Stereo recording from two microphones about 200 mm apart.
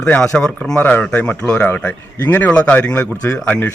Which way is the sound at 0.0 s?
5° left (ahead or behind).